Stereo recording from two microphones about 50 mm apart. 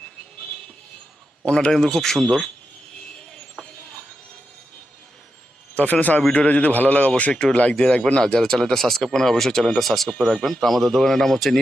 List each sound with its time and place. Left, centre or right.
1.5 s speech: centre
5.7 s a man's voice: left; by 11.6 s centre